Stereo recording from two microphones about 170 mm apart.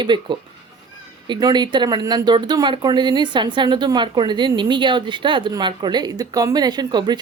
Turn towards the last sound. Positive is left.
turn(degrees=-25)  # may be behind; listen again after turning